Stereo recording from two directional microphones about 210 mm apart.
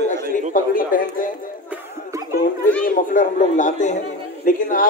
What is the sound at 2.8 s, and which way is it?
Speech, 35° left (ahead or behind).